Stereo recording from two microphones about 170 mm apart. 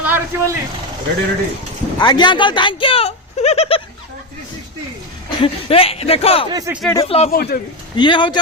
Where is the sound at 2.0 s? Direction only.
25° left (ahead or behind).